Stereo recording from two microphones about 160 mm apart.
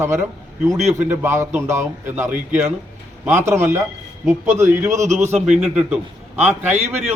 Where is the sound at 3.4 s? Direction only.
15° right (ahead or behind).